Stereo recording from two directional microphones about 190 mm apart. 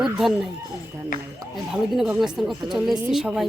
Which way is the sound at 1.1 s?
45° left (ahead or behind).